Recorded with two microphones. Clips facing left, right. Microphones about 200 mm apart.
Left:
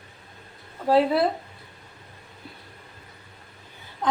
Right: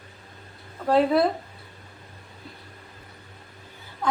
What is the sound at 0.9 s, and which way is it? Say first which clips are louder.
Speech: even; 5° left (ahead or behind).